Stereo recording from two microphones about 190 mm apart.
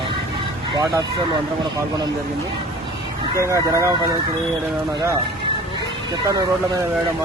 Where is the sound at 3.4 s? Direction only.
15° right (ahead or behind).